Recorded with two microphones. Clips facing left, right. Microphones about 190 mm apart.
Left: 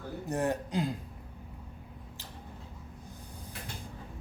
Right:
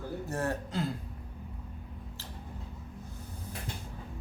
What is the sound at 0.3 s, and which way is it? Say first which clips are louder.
Speech: left 4 dB; 15° left (ahead or behind).